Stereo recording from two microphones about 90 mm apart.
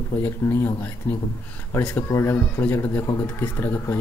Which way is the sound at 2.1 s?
30° left (ahead or behind).